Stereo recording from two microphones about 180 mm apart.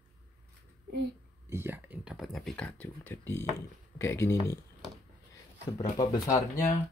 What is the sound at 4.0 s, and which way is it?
Speech, 15° left (ahead or behind).